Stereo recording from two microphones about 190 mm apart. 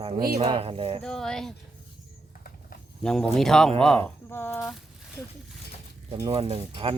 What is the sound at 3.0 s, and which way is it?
Speech, 5° left (ahead or behind).